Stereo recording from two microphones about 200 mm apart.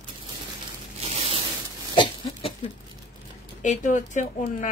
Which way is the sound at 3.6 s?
40° left (ahead or behind).